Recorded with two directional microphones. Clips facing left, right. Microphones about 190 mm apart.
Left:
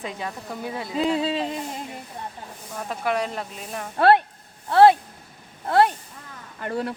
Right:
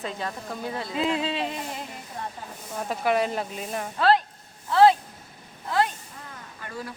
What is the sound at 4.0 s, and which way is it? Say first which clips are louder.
Speech: left 4 dB; 60° left (ahead or behind).